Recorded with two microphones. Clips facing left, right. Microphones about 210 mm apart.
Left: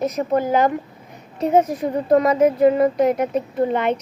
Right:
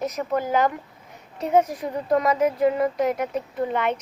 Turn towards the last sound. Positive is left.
turn(degrees=25)  # may be behind; listen again after turning